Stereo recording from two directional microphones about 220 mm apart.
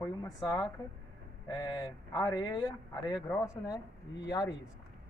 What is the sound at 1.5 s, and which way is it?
Speech, 20° left (ahead or behind).